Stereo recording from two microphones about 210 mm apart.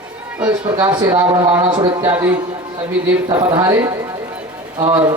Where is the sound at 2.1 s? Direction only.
10° right (ahead or behind).